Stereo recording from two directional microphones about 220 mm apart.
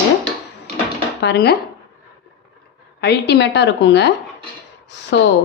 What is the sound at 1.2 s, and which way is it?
Speech, 50° left (ahead or behind).